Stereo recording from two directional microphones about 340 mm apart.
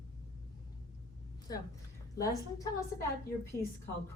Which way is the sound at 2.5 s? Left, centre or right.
Centre.